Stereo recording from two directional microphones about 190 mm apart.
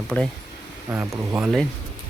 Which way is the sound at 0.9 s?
10° right (ahead or behind).